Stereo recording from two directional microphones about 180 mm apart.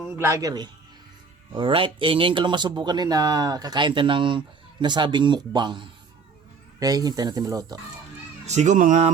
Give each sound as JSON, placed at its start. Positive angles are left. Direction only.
{"t": 0.1, "sound": "a man's voice", "side_deg": -15}
{"t": 8.4, "sound": "speech", "side_deg": -40}